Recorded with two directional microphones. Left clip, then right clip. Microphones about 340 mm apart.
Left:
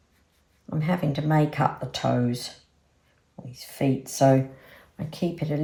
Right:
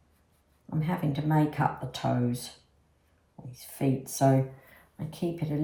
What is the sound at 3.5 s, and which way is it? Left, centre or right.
Speech, centre.